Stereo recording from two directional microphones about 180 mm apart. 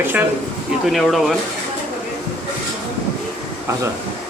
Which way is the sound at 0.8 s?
Centre (ahead or behind).